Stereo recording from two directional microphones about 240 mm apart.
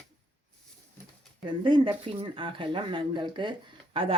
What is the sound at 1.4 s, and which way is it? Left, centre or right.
Speech, centre.